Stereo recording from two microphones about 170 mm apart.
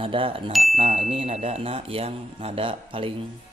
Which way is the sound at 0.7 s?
40° right (ahead or behind).